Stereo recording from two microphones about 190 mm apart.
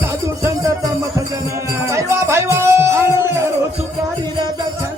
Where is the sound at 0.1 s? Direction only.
15° right (ahead or behind).